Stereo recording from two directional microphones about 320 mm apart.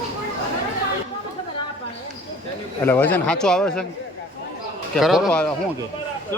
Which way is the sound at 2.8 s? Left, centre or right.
Centre.